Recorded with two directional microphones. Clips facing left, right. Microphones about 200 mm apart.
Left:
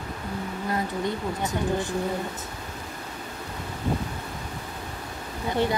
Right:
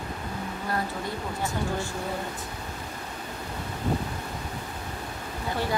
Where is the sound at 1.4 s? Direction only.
20° left (ahead or behind).